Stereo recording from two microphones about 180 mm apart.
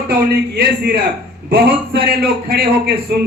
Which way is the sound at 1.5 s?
60° right (ahead or behind).